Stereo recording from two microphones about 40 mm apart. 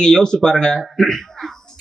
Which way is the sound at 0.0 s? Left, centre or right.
Centre.